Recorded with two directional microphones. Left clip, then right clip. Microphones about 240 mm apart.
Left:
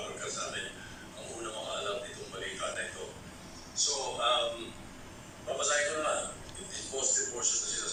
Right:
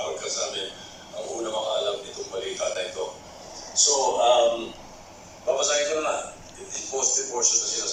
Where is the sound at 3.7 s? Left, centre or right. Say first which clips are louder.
Right 12 dB; right.